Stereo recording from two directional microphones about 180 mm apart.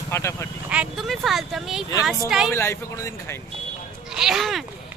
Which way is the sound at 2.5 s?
15° left (ahead or behind).